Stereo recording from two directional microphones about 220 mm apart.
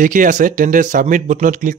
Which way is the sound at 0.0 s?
35° right (ahead or behind).